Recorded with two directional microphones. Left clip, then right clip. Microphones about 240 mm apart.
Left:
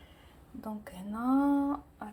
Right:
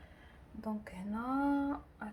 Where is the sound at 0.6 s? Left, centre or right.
Centre.